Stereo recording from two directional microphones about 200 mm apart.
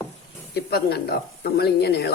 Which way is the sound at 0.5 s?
50° left (ahead or behind).